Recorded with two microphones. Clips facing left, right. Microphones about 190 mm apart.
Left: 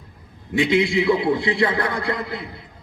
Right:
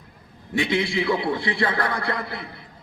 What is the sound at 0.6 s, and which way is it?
A man's voice, 20° left (ahead or behind).